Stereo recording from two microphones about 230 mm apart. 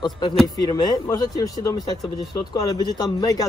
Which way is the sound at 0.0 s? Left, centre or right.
Centre.